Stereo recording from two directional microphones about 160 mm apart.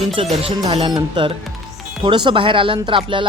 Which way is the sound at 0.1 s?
35° right (ahead or behind).